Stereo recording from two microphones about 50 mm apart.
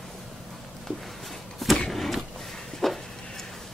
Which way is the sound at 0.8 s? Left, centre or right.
Centre.